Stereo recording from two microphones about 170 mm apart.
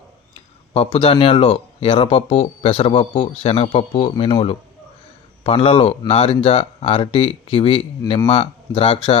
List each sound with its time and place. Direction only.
0.7 s speech: 30° left (ahead or behind)